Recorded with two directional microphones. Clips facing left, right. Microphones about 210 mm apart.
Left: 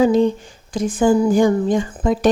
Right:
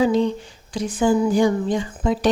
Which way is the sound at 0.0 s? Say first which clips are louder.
Left 4 dB; 50° left (ahead or behind).